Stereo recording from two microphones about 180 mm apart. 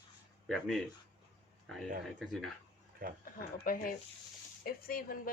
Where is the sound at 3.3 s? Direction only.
50° left (ahead or behind).